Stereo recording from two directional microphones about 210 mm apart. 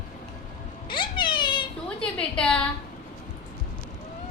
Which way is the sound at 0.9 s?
20° left (ahead or behind).